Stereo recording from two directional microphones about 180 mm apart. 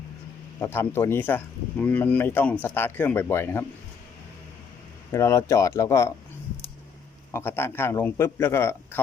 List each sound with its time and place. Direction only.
0.6 s speech: 15° left (ahead or behind)
5.1 s speech: 15° left (ahead or behind)
7.3 s speech: 15° left (ahead or behind)